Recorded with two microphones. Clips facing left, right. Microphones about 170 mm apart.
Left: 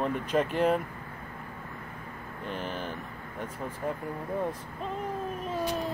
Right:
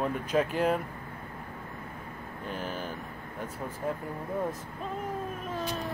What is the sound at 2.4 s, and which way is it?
Speech, 5° right (ahead or behind).